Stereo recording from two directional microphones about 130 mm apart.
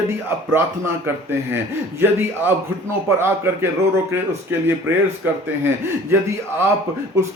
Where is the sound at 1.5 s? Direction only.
20° right (ahead or behind).